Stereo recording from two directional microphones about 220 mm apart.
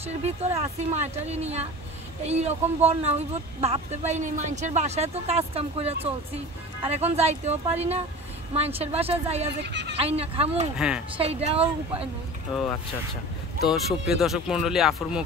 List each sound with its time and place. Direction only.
0.0 s a woman's voice: 30° right (ahead or behind)
9.6 s speech: 50° right (ahead or behind)
9.9 s a woman's voice: 25° right (ahead or behind)
13.6 s speech: centre (ahead or behind)